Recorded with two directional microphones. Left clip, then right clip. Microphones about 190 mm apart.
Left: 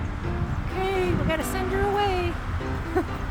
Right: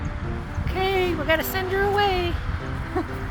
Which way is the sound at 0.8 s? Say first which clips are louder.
Right 3 dB; 25° right (ahead or behind).